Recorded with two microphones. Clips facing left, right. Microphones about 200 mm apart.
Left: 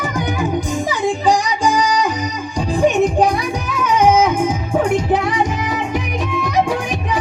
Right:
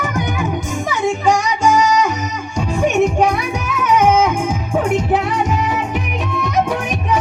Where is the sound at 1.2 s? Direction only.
35° left (ahead or behind).